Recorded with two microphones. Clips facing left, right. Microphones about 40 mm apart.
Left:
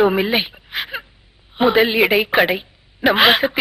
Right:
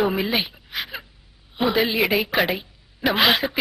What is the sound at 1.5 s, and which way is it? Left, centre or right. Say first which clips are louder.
A woman's voice: left 6 dB; left.